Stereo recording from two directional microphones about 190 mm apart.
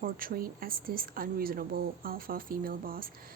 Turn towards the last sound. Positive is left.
turn(degrees=-50)  # may be behind; listen again after turning